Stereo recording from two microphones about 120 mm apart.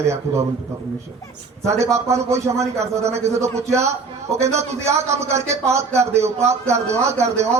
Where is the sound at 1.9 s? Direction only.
25° right (ahead or behind).